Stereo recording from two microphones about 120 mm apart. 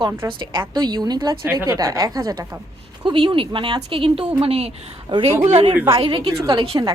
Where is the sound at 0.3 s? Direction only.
40° right (ahead or behind).